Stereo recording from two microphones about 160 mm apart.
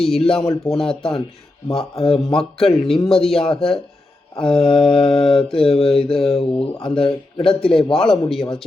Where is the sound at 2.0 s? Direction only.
35° left (ahead or behind).